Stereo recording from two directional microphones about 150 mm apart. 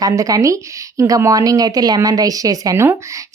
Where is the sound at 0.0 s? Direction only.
25° right (ahead or behind).